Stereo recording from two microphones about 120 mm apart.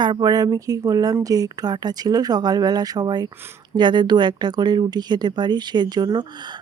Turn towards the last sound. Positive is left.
turn(degrees=-35)  # may be behind; listen again after turning